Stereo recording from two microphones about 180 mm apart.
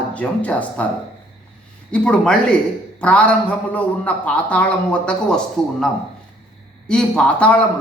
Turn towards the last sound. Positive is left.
turn(degrees=5)  # may be behind; listen again after turning